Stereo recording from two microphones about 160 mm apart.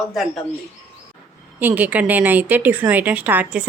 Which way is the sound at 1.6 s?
10° right (ahead or behind).